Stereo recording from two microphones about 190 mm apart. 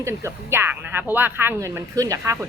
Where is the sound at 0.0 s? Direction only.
15° right (ahead or behind).